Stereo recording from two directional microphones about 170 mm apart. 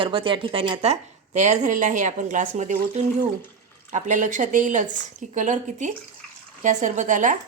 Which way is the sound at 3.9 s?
45° right (ahead or behind).